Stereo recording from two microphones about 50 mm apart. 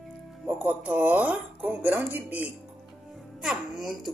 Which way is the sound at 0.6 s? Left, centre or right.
Right.